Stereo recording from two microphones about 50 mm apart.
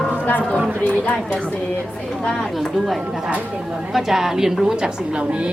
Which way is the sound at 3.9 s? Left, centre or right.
Centre.